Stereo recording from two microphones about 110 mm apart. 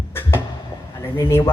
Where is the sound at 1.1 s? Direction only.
25° left (ahead or behind).